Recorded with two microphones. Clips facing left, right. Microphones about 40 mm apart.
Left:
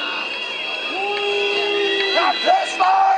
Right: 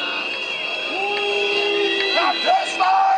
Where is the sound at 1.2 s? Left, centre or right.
Centre.